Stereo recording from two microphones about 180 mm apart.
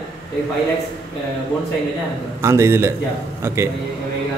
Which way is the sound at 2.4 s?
15° right (ahead or behind).